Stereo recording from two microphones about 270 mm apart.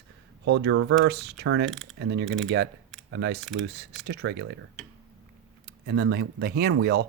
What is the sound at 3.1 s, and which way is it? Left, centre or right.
Speech, right.